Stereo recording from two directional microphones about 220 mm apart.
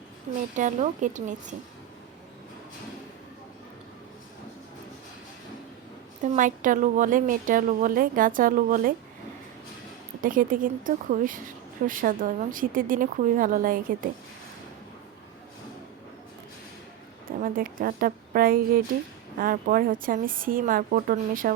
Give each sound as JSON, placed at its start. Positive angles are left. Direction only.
{"t": 0.5, "sound": "a woman's voice", "side_deg": -35}
{"t": 6.2, "sound": "a woman's voice", "side_deg": -35}
{"t": 10.2, "sound": "a woman's voice", "side_deg": -40}
{"t": 17.2, "sound": "a woman's voice", "side_deg": -40}